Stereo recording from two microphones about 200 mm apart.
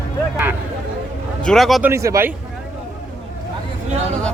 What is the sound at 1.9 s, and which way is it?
Speech, 15° right (ahead or behind).